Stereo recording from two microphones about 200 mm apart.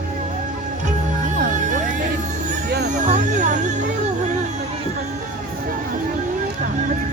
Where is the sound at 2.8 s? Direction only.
40° right (ahead or behind).